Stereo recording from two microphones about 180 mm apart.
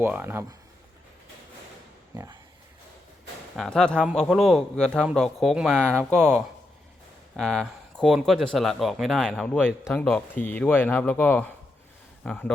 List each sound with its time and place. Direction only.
0.0 s speech: 10° right (ahead or behind)
3.5 s a man's voice: centre (ahead or behind)